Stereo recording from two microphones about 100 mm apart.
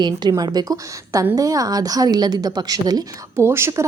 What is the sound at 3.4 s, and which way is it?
Speech, 25° right (ahead or behind).